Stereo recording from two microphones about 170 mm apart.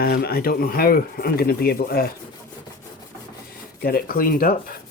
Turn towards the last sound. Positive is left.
turn(degrees=60)  # may be behind; listen again after turning